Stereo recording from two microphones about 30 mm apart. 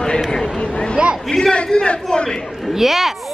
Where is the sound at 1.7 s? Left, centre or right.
Left.